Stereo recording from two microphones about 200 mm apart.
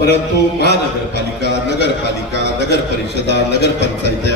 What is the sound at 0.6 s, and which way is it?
A man's voice, 55° left (ahead or behind).